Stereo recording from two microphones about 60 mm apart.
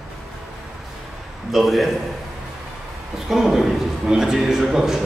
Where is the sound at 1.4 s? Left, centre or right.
Centre.